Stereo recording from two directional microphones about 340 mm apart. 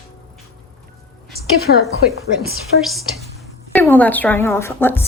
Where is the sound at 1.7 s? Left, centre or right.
Left.